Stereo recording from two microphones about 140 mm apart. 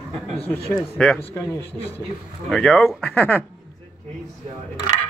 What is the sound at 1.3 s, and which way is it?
Speech, 20° left (ahead or behind).